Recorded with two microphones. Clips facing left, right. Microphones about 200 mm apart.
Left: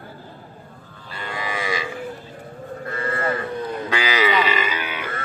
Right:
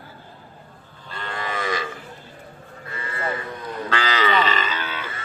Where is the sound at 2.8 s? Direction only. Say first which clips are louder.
Left 7 dB; 50° left (ahead or behind).